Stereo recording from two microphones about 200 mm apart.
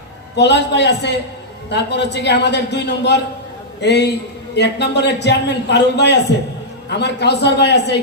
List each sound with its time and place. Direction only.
0.3 s a man's voice: 60° left (ahead or behind)